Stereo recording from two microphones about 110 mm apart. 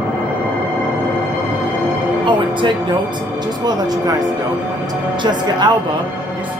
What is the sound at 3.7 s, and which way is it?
Speech, 35° right (ahead or behind).